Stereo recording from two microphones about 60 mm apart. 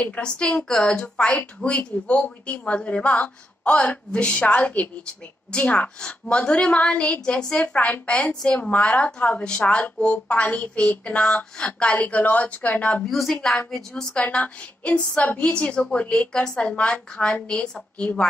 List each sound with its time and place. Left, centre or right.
0.0 s a woman's voice: left
13.0 s a woman's voice: centre
14.2 s a woman's voice: left